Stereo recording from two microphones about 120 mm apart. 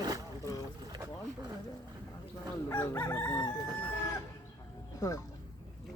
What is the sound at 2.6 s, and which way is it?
Speech, 20° left (ahead or behind).